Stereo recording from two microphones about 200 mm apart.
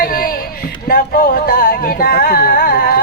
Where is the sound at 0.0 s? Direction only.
45° left (ahead or behind).